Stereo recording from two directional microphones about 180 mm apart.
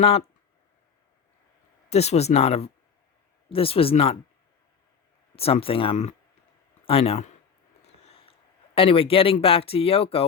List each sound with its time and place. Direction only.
0.0 s speech: 30° left (ahead or behind)
1.9 s speech: 35° left (ahead or behind)
5.4 s speech: 30° left (ahead or behind)